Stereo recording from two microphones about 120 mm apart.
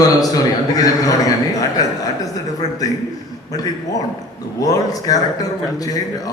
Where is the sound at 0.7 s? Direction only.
30° left (ahead or behind).